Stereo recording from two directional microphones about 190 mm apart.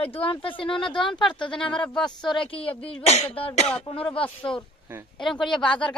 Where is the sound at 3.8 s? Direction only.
30° left (ahead or behind).